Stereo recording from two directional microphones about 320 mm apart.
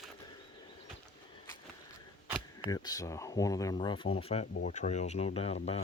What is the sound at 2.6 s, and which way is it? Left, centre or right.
Speech, centre.